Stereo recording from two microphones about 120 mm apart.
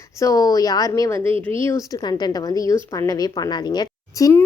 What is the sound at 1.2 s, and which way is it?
Speech, 50° right (ahead or behind).